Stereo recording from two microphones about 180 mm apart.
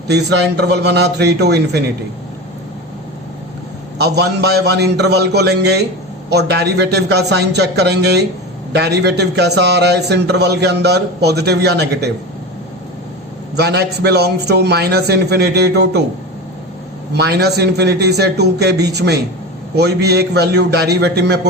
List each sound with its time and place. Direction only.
0.1 s a man's voice: 65° right (ahead or behind)
4.0 s a man's voice: 65° right (ahead or behind)
13.6 s a man's voice: 65° right (ahead or behind)
17.2 s a man's voice: 65° right (ahead or behind)